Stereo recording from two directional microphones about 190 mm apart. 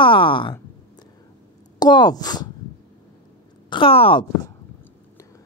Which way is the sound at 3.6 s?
25° left (ahead or behind).